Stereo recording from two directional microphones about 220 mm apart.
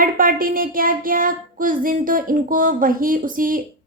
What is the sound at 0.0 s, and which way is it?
Speech, 40° right (ahead or behind).